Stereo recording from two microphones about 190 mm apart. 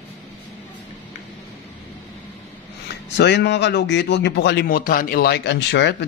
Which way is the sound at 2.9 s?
65° left (ahead or behind).